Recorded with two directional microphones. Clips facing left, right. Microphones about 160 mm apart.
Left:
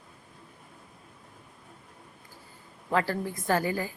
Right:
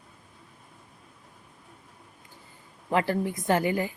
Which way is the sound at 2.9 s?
20° right (ahead or behind).